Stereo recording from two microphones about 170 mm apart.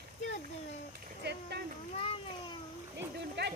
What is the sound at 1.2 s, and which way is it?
Speech, 80° right.